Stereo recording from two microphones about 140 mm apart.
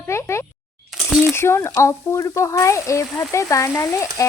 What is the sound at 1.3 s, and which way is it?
Speech, 20° left (ahead or behind).